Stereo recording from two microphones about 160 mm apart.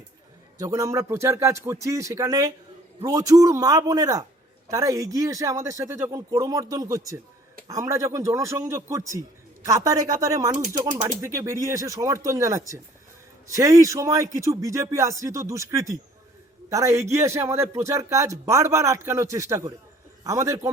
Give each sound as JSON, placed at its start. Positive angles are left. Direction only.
{"t": 0.6, "sound": "speech", "side_deg": -20}